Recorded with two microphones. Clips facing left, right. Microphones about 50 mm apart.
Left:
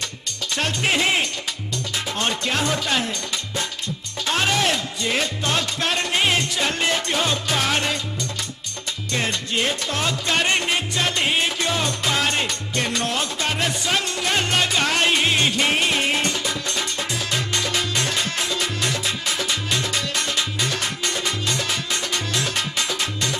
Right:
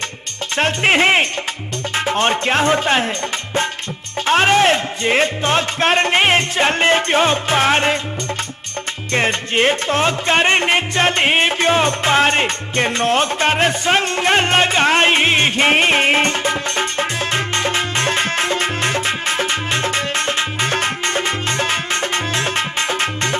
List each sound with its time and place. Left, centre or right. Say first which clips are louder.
0.6 s music: right 7 dB; right
4.3 s music: right 8 dB; right
9.1 s music: right 7 dB; right